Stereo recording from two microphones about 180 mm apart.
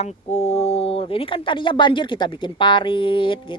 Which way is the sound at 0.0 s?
40° left (ahead or behind).